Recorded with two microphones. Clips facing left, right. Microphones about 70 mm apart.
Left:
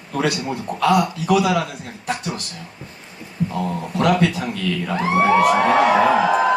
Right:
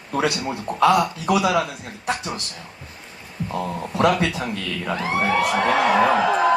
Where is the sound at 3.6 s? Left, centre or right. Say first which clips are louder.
Right 2 dB; centre.